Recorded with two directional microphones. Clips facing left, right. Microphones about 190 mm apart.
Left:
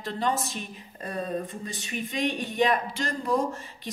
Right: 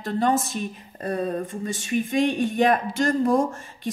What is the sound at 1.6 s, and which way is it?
Speech, 50° right (ahead or behind).